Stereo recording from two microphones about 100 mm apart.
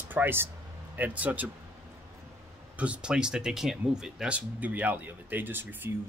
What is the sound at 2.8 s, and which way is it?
Speech, 10° right (ahead or behind).